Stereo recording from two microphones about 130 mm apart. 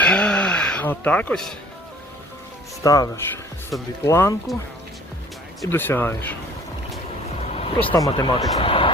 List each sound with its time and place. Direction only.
0.0 s music: 10° left (ahead or behind)
2.8 s speech: 25° left (ahead or behind)
5.6 s speech: 15° left (ahead or behind)
7.4 s vehicle: 50° left (ahead or behind)
7.9 s speech: 35° left (ahead or behind)
8.5 s speech: 45° left (ahead or behind)